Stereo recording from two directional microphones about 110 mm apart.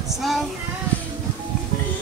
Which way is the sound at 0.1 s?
Centre (ahead or behind).